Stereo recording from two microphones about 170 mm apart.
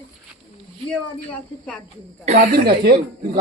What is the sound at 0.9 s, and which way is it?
Speech, 5° left (ahead or behind).